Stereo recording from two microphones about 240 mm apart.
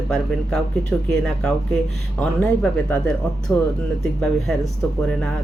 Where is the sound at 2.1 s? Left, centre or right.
Centre.